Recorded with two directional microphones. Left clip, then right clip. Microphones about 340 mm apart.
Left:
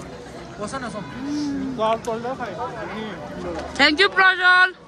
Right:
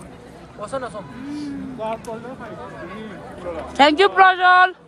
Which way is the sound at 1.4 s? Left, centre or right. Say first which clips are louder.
Left 6 dB; left.